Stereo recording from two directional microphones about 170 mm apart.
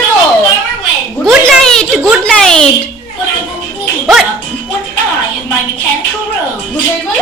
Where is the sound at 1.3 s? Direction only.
5° left (ahead or behind).